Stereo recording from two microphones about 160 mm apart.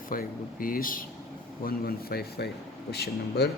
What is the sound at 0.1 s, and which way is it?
Speech, 60° left (ahead or behind).